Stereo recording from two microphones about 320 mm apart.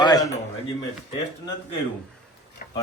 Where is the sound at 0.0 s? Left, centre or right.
Centre.